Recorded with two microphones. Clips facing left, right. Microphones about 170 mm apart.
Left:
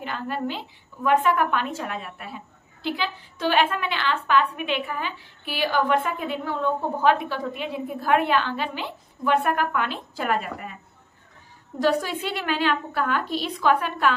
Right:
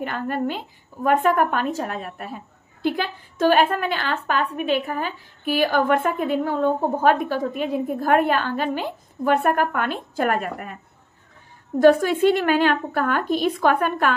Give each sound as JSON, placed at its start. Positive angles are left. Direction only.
{"t": 0.0, "sound": "a woman's voice", "side_deg": -50}
{"t": 11.8, "sound": "a woman's voice", "side_deg": -50}